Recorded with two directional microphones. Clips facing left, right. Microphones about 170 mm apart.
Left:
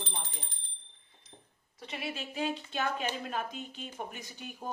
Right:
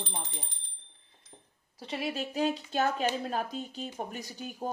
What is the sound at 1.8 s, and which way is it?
Speech, 35° right (ahead or behind).